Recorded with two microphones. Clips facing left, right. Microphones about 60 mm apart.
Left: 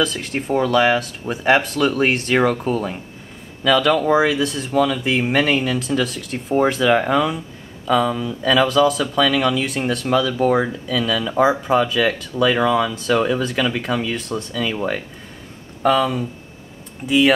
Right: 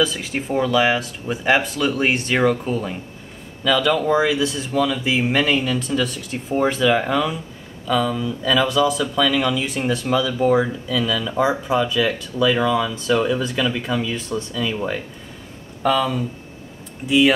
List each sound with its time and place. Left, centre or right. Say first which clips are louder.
0.0 s speech: even; centre
13.4 s speech: left 1 dB; centre